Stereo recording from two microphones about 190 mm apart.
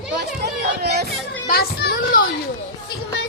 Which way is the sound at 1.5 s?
55° left (ahead or behind).